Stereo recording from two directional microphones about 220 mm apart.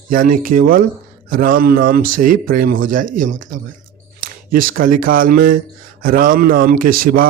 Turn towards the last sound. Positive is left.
turn(degrees=-40)  # may be behind; listen again after turning